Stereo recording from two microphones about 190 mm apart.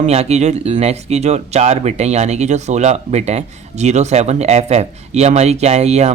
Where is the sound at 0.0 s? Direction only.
35° right (ahead or behind).